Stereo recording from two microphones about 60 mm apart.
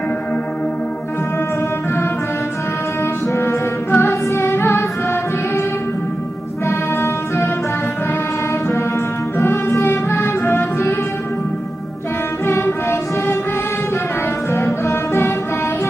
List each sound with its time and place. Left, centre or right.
3.9 s music: left
6.7 s music: left
9.4 s music: left
12.5 s music: left
14.5 s music: left